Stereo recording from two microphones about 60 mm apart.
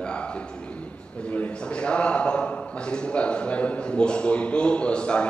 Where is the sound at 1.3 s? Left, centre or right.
Left.